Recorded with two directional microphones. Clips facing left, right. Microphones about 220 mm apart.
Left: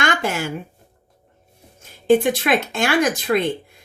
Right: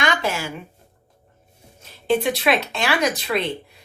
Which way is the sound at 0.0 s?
50° left (ahead or behind).